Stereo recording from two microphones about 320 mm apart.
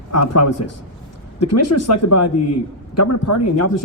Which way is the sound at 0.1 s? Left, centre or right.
Left.